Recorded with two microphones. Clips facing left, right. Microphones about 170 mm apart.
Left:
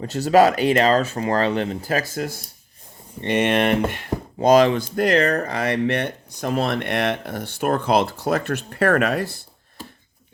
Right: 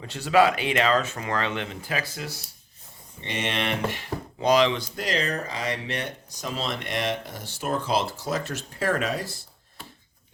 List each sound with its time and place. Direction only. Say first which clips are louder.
0.0 s speech: left 5 dB; 40° left (ahead or behind); by 9.4 s 60° left (ahead or behind)